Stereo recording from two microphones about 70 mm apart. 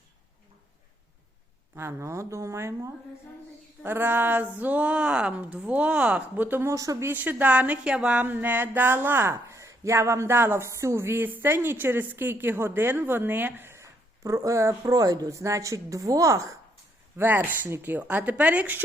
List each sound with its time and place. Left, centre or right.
1.7 s speech: right
3.8 s speech: right
6.7 s speech: right
7.0 s speech: right
9.3 s a woman's voice: right
13.7 s a sound: right
14.9 s speech: right
17.2 s speech: right